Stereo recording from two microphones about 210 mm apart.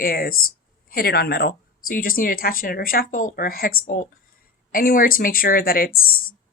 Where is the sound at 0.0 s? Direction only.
45° left (ahead or behind).